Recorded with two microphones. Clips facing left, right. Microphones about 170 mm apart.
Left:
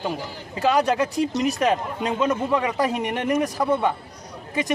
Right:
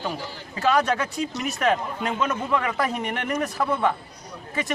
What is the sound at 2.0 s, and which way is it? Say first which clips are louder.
A man's voice: left 3 dB; 20° left (ahead or behind).